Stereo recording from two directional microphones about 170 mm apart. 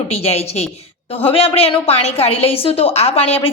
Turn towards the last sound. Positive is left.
turn(degrees=35)  # may be behind; listen again after turning